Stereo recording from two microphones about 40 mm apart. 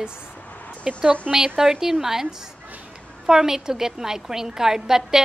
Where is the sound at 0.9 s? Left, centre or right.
Right.